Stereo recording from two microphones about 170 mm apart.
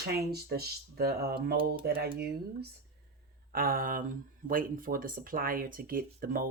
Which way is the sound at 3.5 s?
60° right (ahead or behind).